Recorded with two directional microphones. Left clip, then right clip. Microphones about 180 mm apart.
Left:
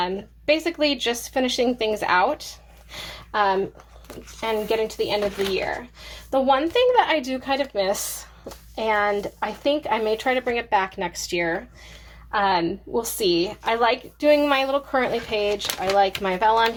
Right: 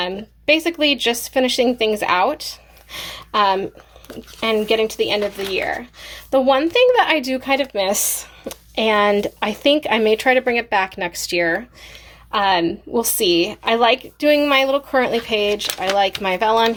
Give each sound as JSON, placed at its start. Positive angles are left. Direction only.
{"t": 0.0, "sound": "speech", "side_deg": -35}
{"t": 6.3, "sound": "speech", "side_deg": -40}